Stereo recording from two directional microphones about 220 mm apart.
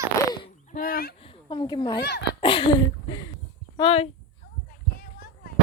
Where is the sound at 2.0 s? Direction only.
50° left (ahead or behind).